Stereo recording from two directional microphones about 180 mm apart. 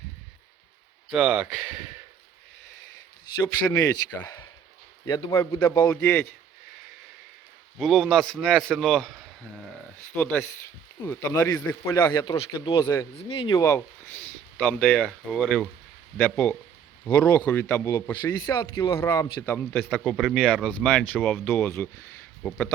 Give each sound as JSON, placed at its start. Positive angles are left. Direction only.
{"t": 1.1, "sound": "speech", "side_deg": -5}
{"t": 3.7, "sound": "a man's voice", "side_deg": 15}
{"t": 7.8, "sound": "a man's voice", "side_deg": 0}
{"t": 13.5, "sound": "a man's voice", "side_deg": 15}
{"t": 19.7, "sound": "a man's voice", "side_deg": 0}